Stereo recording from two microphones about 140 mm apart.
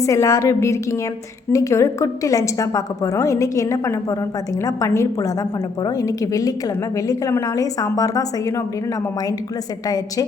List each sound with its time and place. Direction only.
0.0 s a woman's voice: 20° left (ahead or behind)